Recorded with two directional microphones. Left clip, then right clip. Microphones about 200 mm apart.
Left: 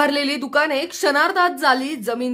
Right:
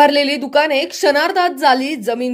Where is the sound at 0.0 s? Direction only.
Centre (ahead or behind).